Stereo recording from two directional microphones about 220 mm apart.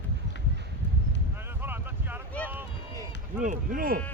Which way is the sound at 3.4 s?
35° right (ahead or behind).